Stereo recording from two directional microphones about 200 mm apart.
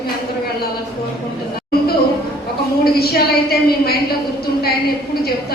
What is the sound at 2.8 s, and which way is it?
A woman's voice, 50° left (ahead or behind).